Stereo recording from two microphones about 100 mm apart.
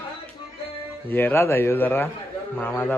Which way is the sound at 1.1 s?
20° left (ahead or behind).